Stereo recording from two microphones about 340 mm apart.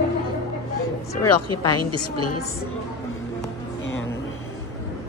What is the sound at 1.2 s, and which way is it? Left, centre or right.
Speech, left.